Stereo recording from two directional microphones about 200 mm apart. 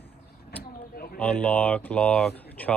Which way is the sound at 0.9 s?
50° left (ahead or behind).